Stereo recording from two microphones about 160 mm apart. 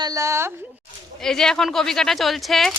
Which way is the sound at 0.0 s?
20° right (ahead or behind).